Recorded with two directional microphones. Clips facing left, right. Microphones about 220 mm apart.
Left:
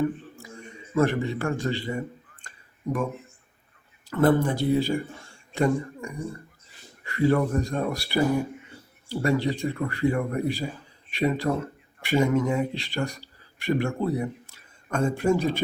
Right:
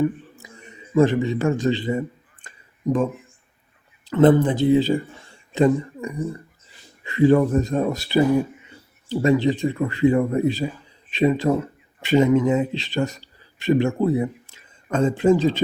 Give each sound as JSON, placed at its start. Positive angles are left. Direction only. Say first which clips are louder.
{"t": 0.9, "sound": "a man's voice", "louder": "right 6 dB", "side_deg": -15}
{"t": 4.1, "sound": "speech", "louder": "right 6 dB", "side_deg": -20}